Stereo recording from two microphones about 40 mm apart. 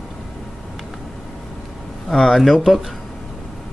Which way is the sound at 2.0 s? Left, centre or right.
Centre.